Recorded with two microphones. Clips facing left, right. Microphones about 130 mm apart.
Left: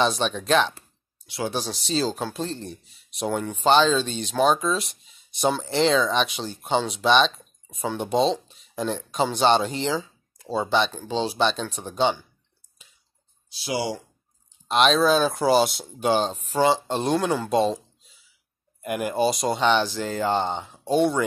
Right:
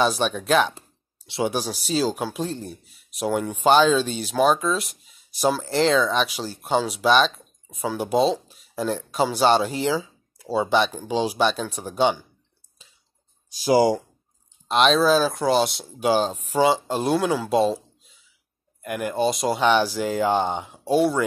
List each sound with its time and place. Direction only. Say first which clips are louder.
0.0 s speech: right 1 dB; 5° right (ahead or behind)
0.7 s a sound: right 4 dB; 25° right (ahead or behind)
1.5 s speech: right 2 dB; 10° right (ahead or behind)
13.6 s speech: right 9 dB; 40° right (ahead or behind)
14.7 s speech: right 1 dB; centre (ahead or behind)
18.8 s speech: left 1 dB; 10° left (ahead or behind)